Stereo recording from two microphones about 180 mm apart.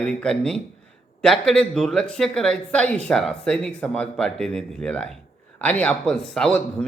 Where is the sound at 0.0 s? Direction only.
5° left (ahead or behind).